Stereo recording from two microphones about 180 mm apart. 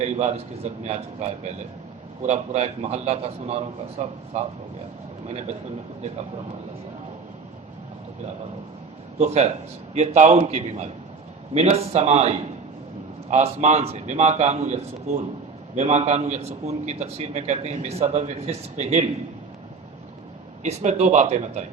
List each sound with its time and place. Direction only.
0.0 s a man's voice: 40° right (ahead or behind)
9.1 s a man's voice: 40° right (ahead or behind)
20.7 s a man's voice: 40° right (ahead or behind)